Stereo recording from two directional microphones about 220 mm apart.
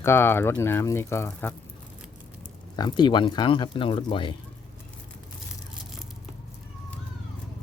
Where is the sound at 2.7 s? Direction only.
20° left (ahead or behind).